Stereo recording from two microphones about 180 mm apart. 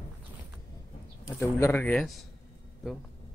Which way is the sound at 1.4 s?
15° left (ahead or behind).